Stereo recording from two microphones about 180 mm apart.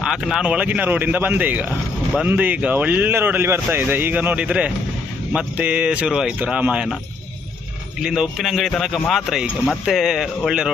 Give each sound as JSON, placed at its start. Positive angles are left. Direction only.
{"t": 0.0, "sound": "speech", "side_deg": -5}
{"t": 8.0, "sound": "a man's voice", "side_deg": -5}